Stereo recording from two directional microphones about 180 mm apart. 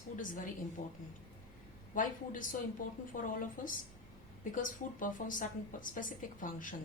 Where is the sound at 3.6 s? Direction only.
50° left (ahead or behind).